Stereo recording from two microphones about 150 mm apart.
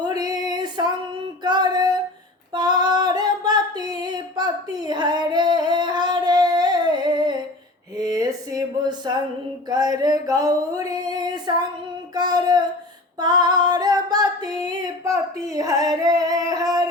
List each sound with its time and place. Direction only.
0.0 s female singing: 25° right (ahead or behind)
1.5 s music: 30° right (ahead or behind)
2.5 s female singing: 30° right (ahead or behind)
8.1 s a sound: 25° right (ahead or behind)
12.1 s child singing: 25° right (ahead or behind)
13.1 s female singing: 25° right (ahead or behind)